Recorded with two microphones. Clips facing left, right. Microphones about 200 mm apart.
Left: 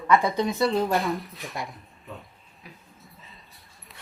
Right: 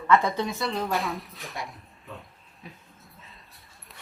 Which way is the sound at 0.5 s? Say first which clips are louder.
Left 5 dB; centre (ahead or behind).